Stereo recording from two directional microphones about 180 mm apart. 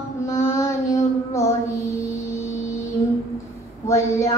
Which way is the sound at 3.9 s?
15° left (ahead or behind).